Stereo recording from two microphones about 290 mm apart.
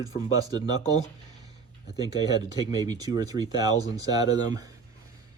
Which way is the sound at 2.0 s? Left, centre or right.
Centre.